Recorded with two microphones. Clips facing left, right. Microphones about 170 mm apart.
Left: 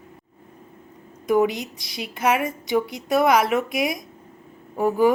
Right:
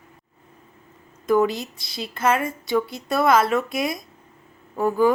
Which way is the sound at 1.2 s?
15° left (ahead or behind).